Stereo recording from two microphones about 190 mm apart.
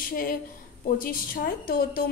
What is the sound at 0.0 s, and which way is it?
A woman's voice, 50° left (ahead or behind).